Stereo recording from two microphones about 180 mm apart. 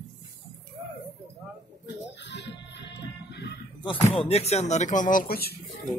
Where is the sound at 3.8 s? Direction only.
30° left (ahead or behind); by 5.5 s 60° left (ahead or behind).